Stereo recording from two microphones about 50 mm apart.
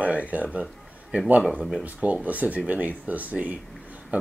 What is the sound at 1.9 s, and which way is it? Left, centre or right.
Speech, right.